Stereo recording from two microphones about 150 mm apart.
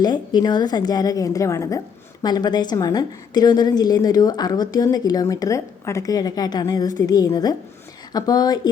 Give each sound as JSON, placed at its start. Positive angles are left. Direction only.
{"t": 0.0, "sound": "a woman's voice", "side_deg": 30}